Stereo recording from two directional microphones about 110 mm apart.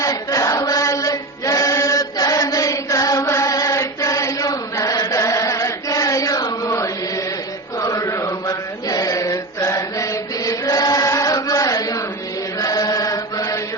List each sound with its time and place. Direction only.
0.0 s chant: 30° left (ahead or behind)
12.5 s mantra: 35° left (ahead or behind)